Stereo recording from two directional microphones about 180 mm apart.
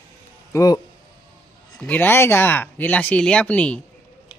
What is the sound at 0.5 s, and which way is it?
Speech, 20° left (ahead or behind).